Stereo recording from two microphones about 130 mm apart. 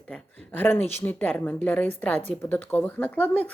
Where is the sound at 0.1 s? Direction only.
15° left (ahead or behind).